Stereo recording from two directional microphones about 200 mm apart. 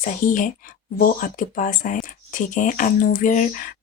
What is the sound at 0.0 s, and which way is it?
Speech, 40° left (ahead or behind).